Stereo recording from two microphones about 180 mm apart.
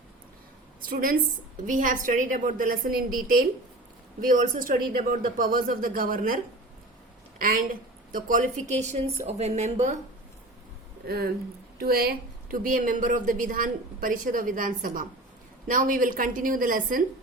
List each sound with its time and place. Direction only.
0.9 s a woman's voice: 50° right (ahead or behind)
11.0 s speech: 60° right (ahead or behind)